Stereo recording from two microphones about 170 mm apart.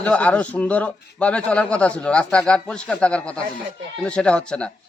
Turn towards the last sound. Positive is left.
turn(degrees=5)  # may be behind; listen again after turning